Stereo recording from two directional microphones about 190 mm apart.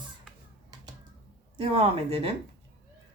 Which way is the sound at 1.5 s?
30° right (ahead or behind).